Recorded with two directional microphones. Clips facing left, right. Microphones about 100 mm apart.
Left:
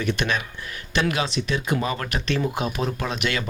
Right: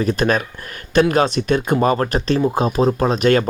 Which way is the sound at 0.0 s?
35° right (ahead or behind).